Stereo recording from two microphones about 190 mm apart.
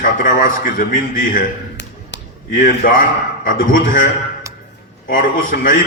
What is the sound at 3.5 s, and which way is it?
Speech, 45° left (ahead or behind).